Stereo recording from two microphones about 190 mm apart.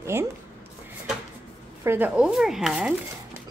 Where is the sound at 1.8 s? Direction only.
10° right (ahead or behind).